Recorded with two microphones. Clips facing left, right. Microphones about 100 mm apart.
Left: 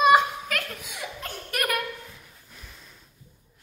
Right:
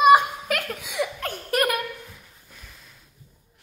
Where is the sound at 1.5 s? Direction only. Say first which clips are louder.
Right 6 dB; 30° right (ahead or behind).